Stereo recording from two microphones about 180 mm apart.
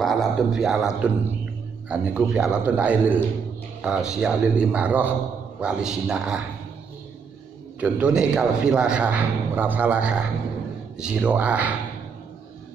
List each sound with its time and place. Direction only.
0.0 s a man's voice: centre (ahead or behind)
7.8 s a man's voice: 5° right (ahead or behind)